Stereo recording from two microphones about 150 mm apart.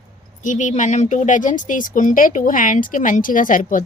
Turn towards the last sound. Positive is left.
turn(degrees=60)  # may be behind; listen again after turning